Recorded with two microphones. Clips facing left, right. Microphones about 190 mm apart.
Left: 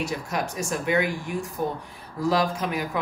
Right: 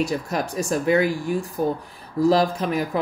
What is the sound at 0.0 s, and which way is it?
Speech, 35° right (ahead or behind).